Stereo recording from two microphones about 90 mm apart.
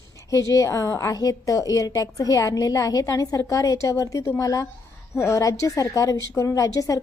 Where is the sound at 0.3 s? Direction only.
35° left (ahead or behind).